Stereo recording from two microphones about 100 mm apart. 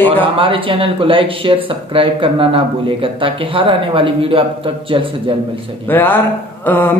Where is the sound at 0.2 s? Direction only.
60° right (ahead or behind).